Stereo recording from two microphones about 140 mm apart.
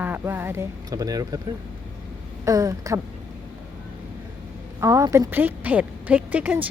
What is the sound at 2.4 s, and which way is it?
Speech, 25° right (ahead or behind).